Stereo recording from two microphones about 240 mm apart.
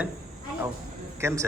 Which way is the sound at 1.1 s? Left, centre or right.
Centre.